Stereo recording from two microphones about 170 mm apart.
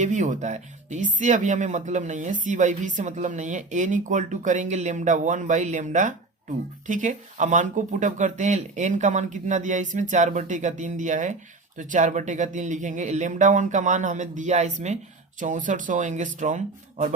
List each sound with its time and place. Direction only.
0.0 s speech: 45° right (ahead or behind)